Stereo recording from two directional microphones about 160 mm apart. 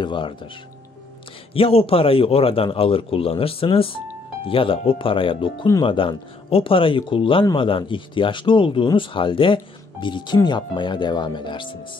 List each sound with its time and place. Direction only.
0.0 s speech: 30° left (ahead or behind)
1.5 s speech: 35° left (ahead or behind)